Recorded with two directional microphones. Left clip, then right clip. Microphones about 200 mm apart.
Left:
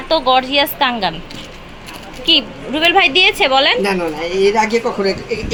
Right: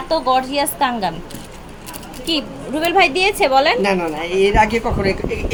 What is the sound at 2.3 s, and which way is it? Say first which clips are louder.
A woman's voice: left 7 dB; centre (ahead or behind).